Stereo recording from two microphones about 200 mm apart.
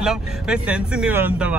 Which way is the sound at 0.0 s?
Centre (ahead or behind).